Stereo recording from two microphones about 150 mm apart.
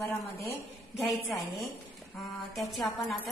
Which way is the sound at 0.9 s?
Centre (ahead or behind).